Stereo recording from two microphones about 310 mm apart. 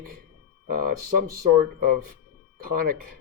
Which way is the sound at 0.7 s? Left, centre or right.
Right.